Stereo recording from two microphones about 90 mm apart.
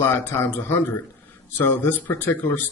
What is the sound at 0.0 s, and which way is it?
Speech, 25° left (ahead or behind).